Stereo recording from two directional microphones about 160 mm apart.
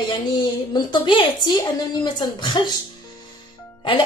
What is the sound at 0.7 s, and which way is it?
A woman's voice, 30° left (ahead or behind).